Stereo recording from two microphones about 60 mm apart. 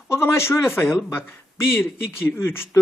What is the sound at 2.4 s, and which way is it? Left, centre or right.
Speech, left.